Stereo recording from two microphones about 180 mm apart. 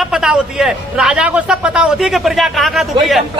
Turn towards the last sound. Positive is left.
turn(degrees=0)  # may be behind; listen again after turning